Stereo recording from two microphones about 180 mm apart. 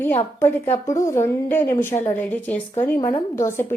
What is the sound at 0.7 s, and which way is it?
Speech, 40° left (ahead or behind).